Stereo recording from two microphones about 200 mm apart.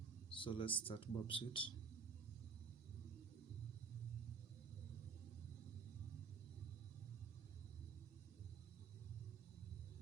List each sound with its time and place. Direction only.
0.3 s speech: 25° left (ahead or behind)